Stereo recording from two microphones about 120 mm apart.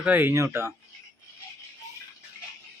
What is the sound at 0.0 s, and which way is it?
Speech, 15° right (ahead or behind).